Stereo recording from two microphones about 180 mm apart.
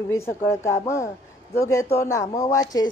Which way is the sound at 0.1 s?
15° left (ahead or behind).